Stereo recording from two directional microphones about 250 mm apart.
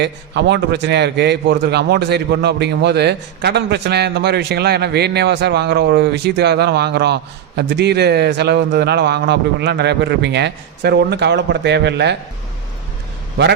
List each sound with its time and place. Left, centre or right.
0.0 s a man's voice: right